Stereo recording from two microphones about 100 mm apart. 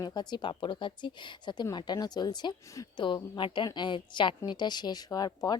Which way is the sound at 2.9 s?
50° left (ahead or behind).